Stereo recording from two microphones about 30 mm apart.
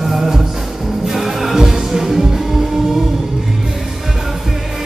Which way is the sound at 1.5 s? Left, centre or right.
Centre.